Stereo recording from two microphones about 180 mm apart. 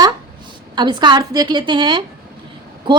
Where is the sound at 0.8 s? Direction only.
25° right (ahead or behind).